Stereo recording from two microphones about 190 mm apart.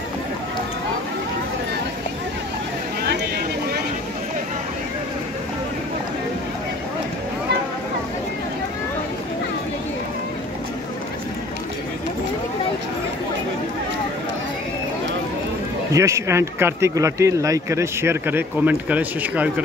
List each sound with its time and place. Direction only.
15.9 s speech: 15° right (ahead or behind)